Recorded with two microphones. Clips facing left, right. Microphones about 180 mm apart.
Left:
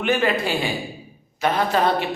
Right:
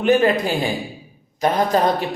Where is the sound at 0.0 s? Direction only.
40° right (ahead or behind).